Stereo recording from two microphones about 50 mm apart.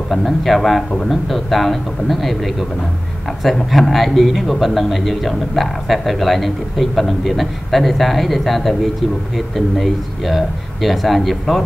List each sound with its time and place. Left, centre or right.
0.1 s speech: centre
9.8 s speech: centre